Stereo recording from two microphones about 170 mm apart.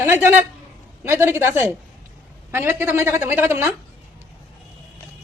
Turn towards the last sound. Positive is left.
turn(degrees=-15)  # may be behind; listen again after turning